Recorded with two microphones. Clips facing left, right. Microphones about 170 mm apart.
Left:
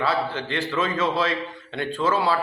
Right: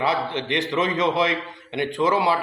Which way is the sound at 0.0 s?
20° right (ahead or behind).